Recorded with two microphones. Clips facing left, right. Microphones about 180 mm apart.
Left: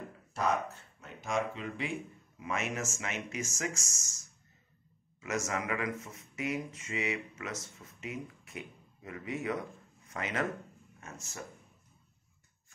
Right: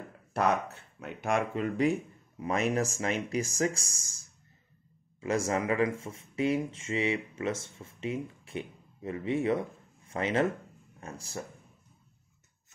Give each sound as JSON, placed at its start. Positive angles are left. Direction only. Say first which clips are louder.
{"t": 0.3, "sound": "speech", "louder": "right 4 dB", "side_deg": -65}